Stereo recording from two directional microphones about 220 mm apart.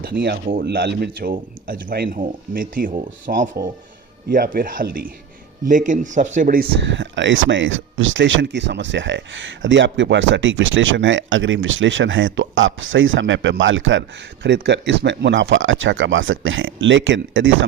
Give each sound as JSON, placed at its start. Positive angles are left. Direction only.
{"t": 0.0, "sound": "speech", "side_deg": -45}